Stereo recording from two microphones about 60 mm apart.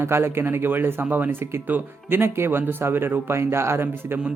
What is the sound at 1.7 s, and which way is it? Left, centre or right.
Speech, right.